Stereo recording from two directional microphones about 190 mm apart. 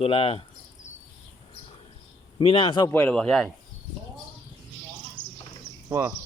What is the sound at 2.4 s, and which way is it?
Speech, 30° left (ahead or behind).